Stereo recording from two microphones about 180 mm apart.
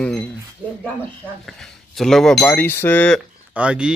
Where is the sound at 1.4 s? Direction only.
Centre (ahead or behind).